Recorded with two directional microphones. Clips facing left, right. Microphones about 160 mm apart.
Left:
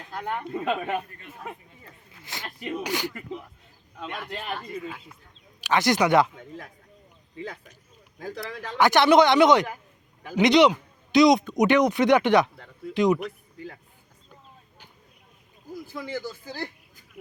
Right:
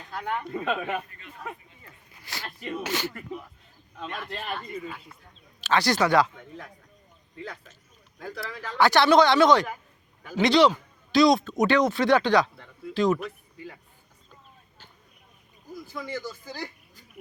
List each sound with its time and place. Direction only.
0.3 s a man's voice: 10° left (ahead or behind)
2.2 s a man's voice: 20° left (ahead or behind)
8.4 s a man's voice: 20° left (ahead or behind)